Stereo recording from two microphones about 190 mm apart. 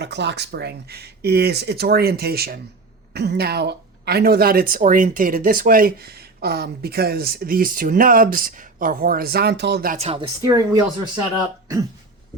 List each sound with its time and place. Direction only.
0.0 s speech: 65° right (ahead or behind)
10.0 s speech: 30° right (ahead or behind)
10.4 s speech: 20° right (ahead or behind)